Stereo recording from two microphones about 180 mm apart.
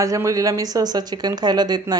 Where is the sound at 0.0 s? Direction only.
15° right (ahead or behind).